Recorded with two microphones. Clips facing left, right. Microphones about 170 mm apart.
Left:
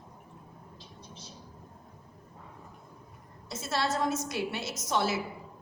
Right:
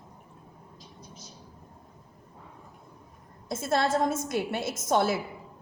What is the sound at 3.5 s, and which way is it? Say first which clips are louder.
A woman's voice: right 5 dB; 50° right (ahead or behind).